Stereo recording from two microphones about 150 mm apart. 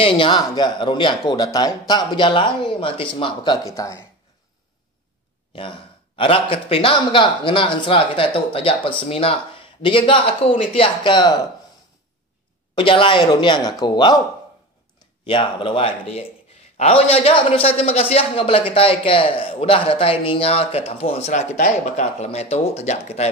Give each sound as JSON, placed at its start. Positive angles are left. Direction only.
{"t": 0.0, "sound": "speech", "side_deg": 35}
{"t": 5.6, "sound": "speech", "side_deg": 35}
{"t": 12.7, "sound": "speech", "side_deg": 35}
{"t": 15.2, "sound": "speech", "side_deg": 35}